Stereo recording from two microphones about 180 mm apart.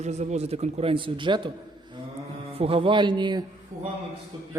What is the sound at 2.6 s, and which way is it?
Speech, 30° right (ahead or behind).